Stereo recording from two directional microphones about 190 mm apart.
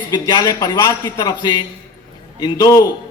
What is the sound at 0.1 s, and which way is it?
A man's voice, 20° left (ahead or behind).